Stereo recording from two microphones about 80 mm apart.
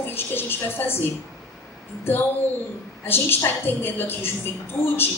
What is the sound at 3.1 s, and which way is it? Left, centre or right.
A woman's voice, left.